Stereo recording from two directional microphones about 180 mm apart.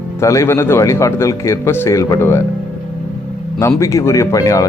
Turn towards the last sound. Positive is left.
turn(degrees=20)  # may be behind; listen again after turning